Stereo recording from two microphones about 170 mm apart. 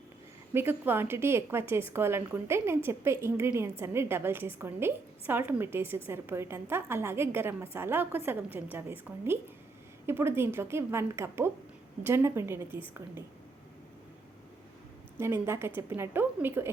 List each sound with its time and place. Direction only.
0.5 s speech: 10° right (ahead or behind)
15.2 s speech: 15° right (ahead or behind)